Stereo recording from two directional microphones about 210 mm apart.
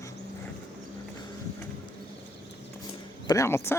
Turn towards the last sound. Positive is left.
turn(degrees=10)  # may be behind; listen again after turning